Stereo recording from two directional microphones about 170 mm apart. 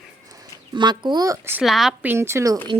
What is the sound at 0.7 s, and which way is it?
Speech, 25° right (ahead or behind).